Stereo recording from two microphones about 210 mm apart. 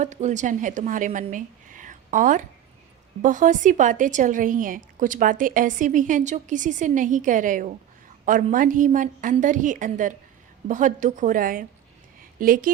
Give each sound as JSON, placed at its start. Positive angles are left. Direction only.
{"t": 0.0, "sound": "a woman's voice", "side_deg": -35}